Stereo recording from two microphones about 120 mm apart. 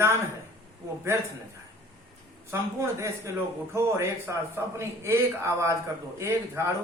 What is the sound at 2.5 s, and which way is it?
A man's voice, 25° right (ahead or behind).